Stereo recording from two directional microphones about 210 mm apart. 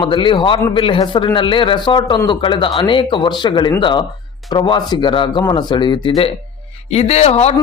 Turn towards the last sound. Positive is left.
turn(degrees=30)  # may be behind; listen again after turning